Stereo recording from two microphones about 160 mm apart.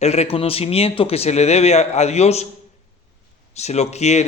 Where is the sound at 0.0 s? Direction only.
40° left (ahead or behind).